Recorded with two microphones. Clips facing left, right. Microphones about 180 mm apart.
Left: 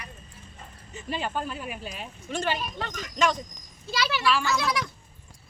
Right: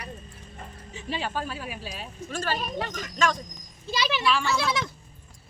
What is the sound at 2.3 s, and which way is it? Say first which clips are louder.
Speech: left 2 dB; 20° left (ahead or behind).